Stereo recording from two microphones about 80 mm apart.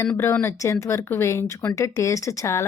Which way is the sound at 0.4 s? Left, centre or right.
Left.